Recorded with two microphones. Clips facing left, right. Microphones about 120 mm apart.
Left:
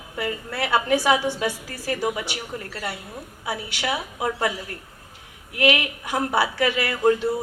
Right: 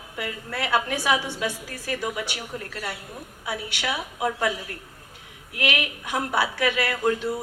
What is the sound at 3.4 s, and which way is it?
Speech, 30° left (ahead or behind).